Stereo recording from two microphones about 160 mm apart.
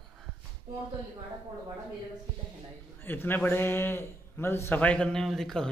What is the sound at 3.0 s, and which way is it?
A man's voice, 15° left (ahead or behind).